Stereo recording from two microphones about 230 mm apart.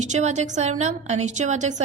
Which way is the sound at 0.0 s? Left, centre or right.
Right.